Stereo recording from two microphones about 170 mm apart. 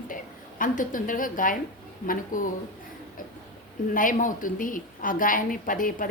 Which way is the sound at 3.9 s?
50° left (ahead or behind).